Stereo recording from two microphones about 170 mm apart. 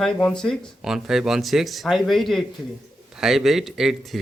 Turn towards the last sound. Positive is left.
turn(degrees=0)  # may be behind; listen again after turning